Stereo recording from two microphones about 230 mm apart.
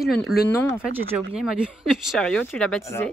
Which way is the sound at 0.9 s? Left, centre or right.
Centre.